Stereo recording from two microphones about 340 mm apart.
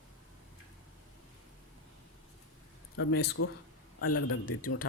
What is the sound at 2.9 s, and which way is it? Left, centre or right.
Speech, left.